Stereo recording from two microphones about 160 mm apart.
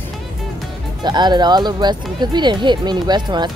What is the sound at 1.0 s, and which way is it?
Speech, 25° right (ahead or behind).